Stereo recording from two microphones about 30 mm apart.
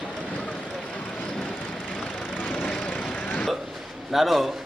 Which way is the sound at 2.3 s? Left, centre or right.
Left.